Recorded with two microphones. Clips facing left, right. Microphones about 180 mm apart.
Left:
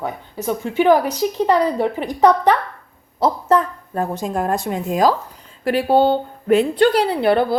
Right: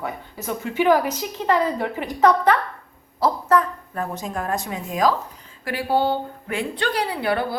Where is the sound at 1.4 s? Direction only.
15° left (ahead or behind).